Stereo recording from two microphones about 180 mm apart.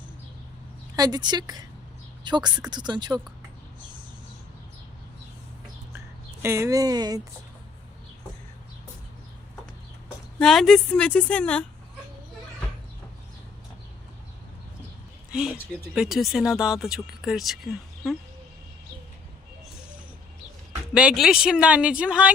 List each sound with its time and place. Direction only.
0.9 s speech: 20° right (ahead or behind)
6.4 s speech: 15° right (ahead or behind)
10.3 s speech: centre (ahead or behind)
15.3 s speech: 5° right (ahead or behind)
20.9 s speech: 5° right (ahead or behind)